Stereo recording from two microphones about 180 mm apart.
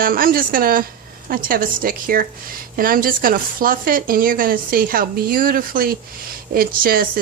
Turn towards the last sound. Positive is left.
turn(degrees=-55)  # may be behind; listen again after turning